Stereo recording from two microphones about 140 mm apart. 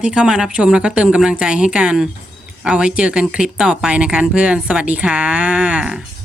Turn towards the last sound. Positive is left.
turn(degrees=-5)  # may be behind; listen again after turning